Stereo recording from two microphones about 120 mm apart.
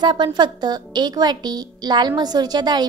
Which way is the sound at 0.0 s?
40° right (ahead or behind).